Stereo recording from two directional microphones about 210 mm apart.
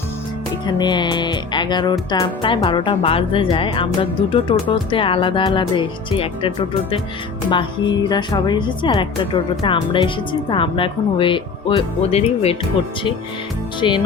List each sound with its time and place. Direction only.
0.7 s music: 20° left (ahead or behind)
7.5 s music: 20° left (ahead or behind)
13.8 s music: 25° left (ahead or behind)